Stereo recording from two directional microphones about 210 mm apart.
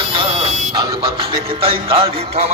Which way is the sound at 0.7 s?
20° right (ahead or behind).